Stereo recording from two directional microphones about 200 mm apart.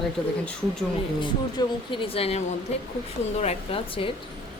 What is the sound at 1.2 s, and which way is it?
Speech, 25° left (ahead or behind).